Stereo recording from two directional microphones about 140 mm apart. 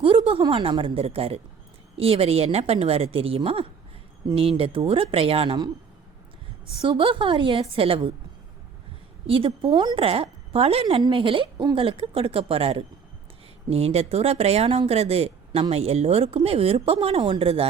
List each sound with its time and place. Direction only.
0.3 s a woman's voice: 40° right (ahead or behind)
6.8 s a woman's voice: 35° right (ahead or behind)
9.2 s a woman's voice: 40° right (ahead or behind)